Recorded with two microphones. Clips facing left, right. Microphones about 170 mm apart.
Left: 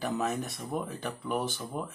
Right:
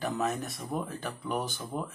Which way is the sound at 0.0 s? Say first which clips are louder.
Even; centre (ahead or behind).